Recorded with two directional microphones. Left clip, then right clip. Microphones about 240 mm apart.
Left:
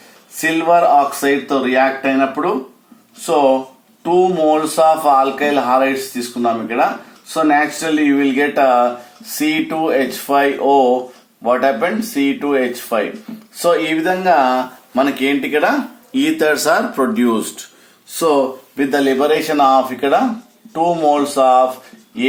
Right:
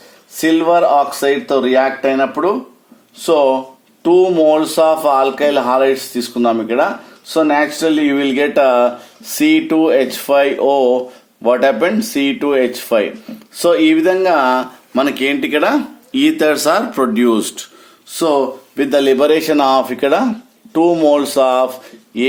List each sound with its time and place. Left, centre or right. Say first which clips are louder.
0.3 s speech: right 1 dB; right
4.0 s speech: right 3 dB; right